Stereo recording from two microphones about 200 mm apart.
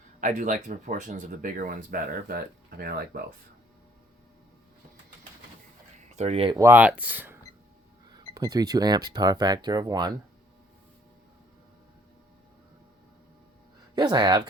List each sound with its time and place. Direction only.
0.2 s speech: 40° right (ahead or behind)
6.1 s speech: 30° right (ahead or behind)
6.6 s speech: 10° right (ahead or behind)
8.1 s speech: 20° right (ahead or behind)
13.9 s speech: 20° right (ahead or behind)